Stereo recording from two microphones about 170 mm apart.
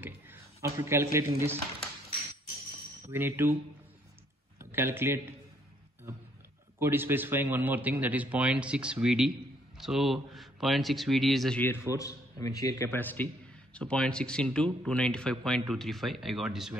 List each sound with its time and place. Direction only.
0.0 s speech: 15° right (ahead or behind)
3.1 s a man's voice: 15° right (ahead or behind)
4.6 s speech: 15° right (ahead or behind)
6.8 s a man's voice: 15° right (ahead or behind)